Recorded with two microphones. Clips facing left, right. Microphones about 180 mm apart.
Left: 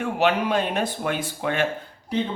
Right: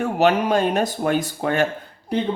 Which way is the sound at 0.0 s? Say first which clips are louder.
Right 4 dB; 40° right (ahead or behind).